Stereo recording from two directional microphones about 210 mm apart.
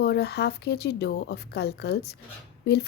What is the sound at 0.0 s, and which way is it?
Speech, 50° left (ahead or behind).